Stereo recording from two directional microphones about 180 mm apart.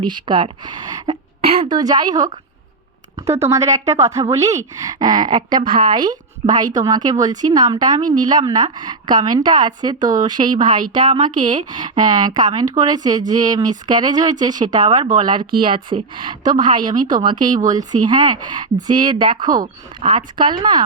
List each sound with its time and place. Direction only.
0.0 s speech: 25° right (ahead or behind)
3.5 s speech: 15° right (ahead or behind)
7.9 s speech: 45° right (ahead or behind)
8.2 s speech: 20° right (ahead or behind)
10.8 s speech: 50° right (ahead or behind)
11.5 s speech: 25° right (ahead or behind)
16.8 s speech: 45° right (ahead or behind)
17.2 s speech: 25° right (ahead or behind)